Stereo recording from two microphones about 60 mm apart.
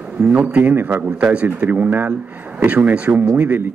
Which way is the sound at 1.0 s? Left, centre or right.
Right.